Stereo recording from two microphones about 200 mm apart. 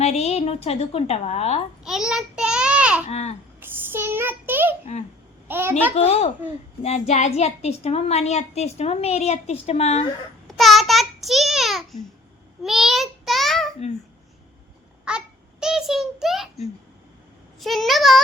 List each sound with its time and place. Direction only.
0.0 s a woman's voice: 30° left (ahead or behind)
1.8 s a sound: centre (ahead or behind)
3.1 s a woman's voice: 35° left (ahead or behind)
3.6 s child singing: 10° right (ahead or behind)
5.5 s a child's voice: 10° right (ahead or behind)
5.9 s a woman's voice: 30° left (ahead or behind)
10.4 s child singing: centre (ahead or behind)
12.6 s a child's voice: centre (ahead or behind)
15.1 s babbling: 5° right (ahead or behind)
15.6 s a child's voice: centre (ahead or behind)